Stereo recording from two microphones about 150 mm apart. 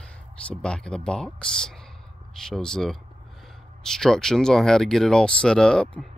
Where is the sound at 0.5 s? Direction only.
5° left (ahead or behind).